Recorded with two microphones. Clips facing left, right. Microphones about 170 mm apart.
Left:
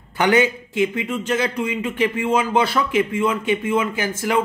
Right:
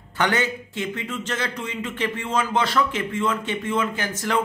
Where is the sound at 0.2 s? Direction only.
10° left (ahead or behind).